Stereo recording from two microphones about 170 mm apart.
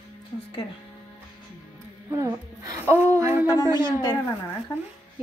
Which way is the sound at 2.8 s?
15° right (ahead or behind).